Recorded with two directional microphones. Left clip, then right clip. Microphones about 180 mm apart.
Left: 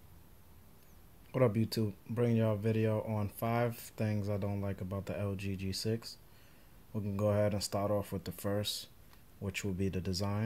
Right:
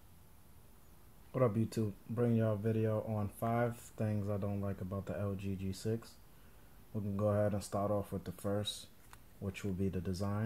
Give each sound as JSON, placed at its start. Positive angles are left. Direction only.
{"t": 1.3, "sound": "speech", "side_deg": 20}